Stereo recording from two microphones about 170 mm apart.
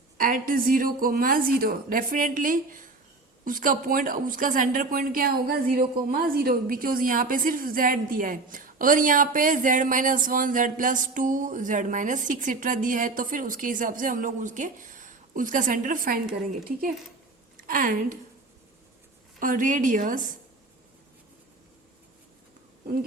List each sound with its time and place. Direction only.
0.2 s a woman's voice: 55° right (ahead or behind)
17.7 s a woman's voice: 50° right (ahead or behind)
19.4 s a woman's voice: 50° right (ahead or behind)